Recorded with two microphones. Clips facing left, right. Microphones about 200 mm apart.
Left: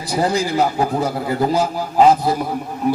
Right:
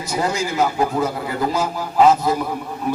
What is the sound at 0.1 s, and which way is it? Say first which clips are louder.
Speech: left 4 dB; 35° left (ahead or behind).